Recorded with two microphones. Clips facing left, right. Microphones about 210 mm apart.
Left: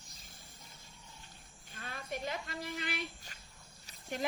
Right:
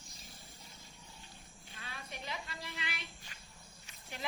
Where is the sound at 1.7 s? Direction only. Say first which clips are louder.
Left 7 dB; 50° left (ahead or behind).